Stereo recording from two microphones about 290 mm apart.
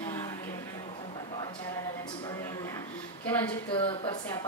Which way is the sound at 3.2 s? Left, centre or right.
Centre.